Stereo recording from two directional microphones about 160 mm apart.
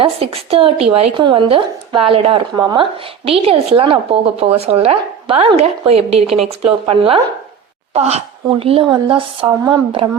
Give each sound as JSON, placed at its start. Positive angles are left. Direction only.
{"t": 0.0, "sound": "a woman's voice", "side_deg": -35}